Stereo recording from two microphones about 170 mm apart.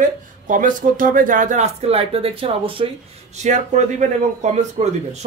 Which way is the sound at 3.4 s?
45° right (ahead or behind).